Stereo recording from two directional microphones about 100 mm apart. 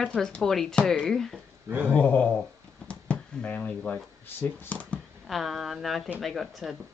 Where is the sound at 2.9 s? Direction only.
10° left (ahead or behind).